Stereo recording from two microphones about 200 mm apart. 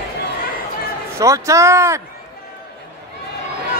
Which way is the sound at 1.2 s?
15° right (ahead or behind).